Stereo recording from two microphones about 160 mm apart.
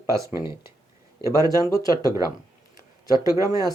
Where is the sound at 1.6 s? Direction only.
20° left (ahead or behind).